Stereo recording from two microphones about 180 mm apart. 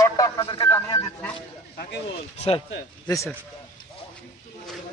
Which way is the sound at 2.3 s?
35° left (ahead or behind).